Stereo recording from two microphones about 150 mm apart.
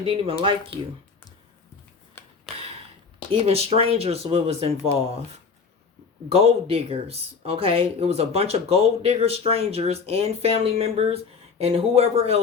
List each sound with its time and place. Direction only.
0.0 s speech: 40° right (ahead or behind)
2.2 s a sound: 15° left (ahead or behind)
3.4 s speech: 45° right (ahead or behind)